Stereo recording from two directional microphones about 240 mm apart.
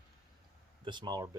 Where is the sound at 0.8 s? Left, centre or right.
Centre.